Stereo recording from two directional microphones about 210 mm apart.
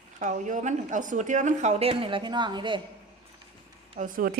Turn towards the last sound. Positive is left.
turn(degrees=-40)  # may be behind; listen again after turning